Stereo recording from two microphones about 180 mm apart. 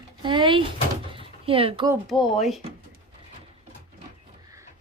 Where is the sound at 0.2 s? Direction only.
25° right (ahead or behind).